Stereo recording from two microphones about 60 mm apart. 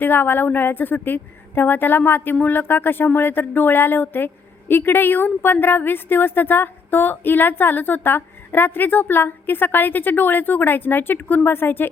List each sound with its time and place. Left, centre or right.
0.0 s a woman's voice: left